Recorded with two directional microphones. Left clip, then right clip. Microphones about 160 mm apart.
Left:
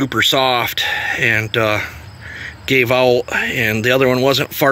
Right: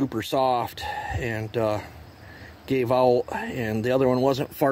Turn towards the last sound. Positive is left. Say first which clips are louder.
# left 8 dB
turn(degrees=-30)  # may be behind; listen again after turning